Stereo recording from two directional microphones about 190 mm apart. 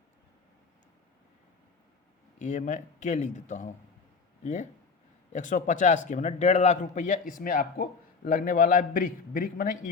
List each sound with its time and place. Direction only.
2.4 s a man's voice: 40° left (ahead or behind)